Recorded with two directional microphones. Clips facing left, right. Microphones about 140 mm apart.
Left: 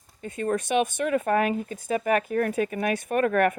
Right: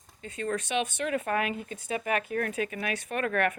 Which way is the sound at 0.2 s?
50° left (ahead or behind).